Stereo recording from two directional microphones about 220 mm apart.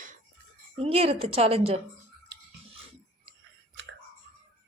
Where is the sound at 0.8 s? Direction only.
30° right (ahead or behind).